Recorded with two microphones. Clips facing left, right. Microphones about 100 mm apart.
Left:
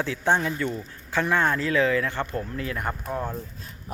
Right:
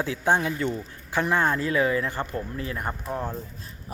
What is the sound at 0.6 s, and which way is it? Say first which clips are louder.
Speech: right 1 dB; 15° right (ahead or behind).